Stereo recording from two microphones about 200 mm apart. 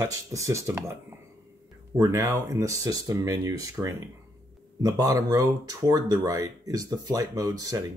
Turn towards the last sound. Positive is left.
turn(degrees=-20)  # may be behind; listen again after turning